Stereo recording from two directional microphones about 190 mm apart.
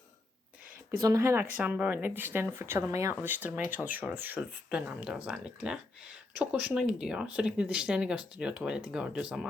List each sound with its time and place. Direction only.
1.0 s speech: 15° right (ahead or behind)